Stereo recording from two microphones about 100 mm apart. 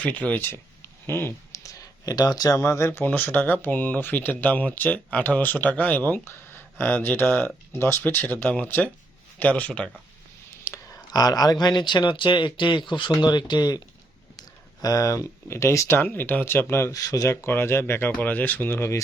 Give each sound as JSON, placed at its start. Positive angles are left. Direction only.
{"t": 0.0, "sound": "speech", "side_deg": 15}
{"t": 10.5, "sound": "a sound", "side_deg": 25}
{"t": 11.1, "sound": "speech", "side_deg": 40}